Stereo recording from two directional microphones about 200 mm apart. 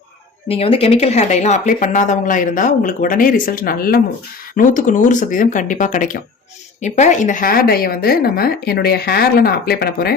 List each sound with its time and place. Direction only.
0.4 s speech: 30° left (ahead or behind); by 10.2 s 50° left (ahead or behind)